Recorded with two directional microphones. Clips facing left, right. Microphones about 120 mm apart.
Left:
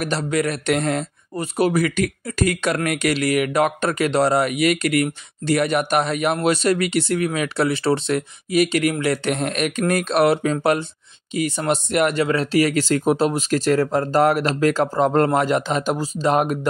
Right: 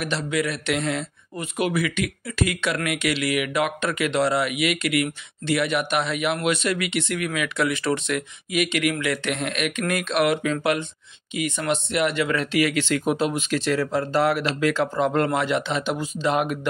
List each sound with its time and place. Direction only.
0.0 s speech: 40° left (ahead or behind)